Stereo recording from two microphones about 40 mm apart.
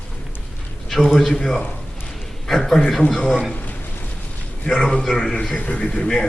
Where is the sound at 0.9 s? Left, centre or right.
Centre.